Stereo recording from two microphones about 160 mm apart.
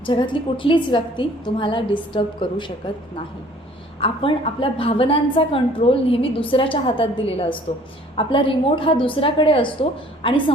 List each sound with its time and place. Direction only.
0.0 s a woman's voice: 30° left (ahead or behind)
4.0 s a woman's voice: 35° left (ahead or behind)